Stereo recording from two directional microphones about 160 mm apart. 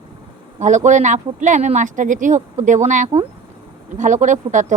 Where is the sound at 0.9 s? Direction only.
50° right (ahead or behind).